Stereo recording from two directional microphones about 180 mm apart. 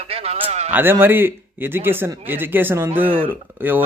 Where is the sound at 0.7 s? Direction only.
10° right (ahead or behind).